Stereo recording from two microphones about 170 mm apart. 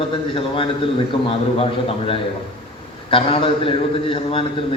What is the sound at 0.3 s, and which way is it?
A man's voice, 30° left (ahead or behind).